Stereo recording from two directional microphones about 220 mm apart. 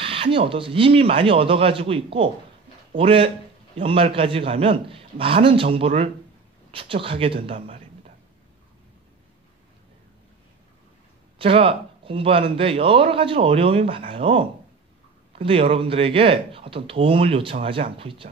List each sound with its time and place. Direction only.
0.0 s a man's voice: 25° right (ahead or behind)
11.3 s a man's voice: 25° right (ahead or behind)